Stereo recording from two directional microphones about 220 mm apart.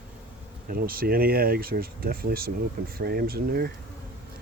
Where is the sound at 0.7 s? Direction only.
40° right (ahead or behind).